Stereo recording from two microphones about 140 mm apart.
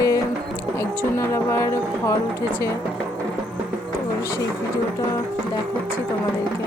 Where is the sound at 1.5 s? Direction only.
20° left (ahead or behind).